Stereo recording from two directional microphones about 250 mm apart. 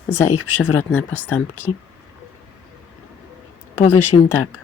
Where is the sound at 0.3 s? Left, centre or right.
Left.